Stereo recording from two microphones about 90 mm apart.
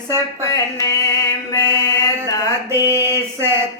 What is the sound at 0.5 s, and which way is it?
Music, 40° left (ahead or behind).